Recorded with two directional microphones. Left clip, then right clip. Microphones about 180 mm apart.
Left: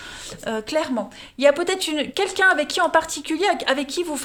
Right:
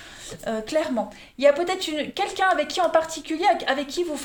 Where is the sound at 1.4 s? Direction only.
50° left (ahead or behind).